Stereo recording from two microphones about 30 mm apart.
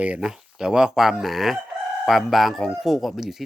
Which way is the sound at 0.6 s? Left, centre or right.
Right.